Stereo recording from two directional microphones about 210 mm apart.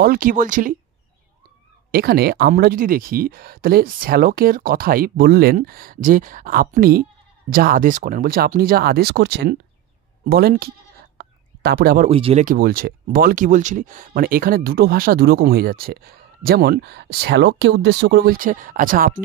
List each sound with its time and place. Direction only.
0.0 s speech: 45° right (ahead or behind)
1.9 s speech: 45° right (ahead or behind)
11.1 s whispering: 50° right (ahead or behind)
12.1 s speech: 30° right (ahead or behind)
12.4 s speech: 45° right (ahead or behind)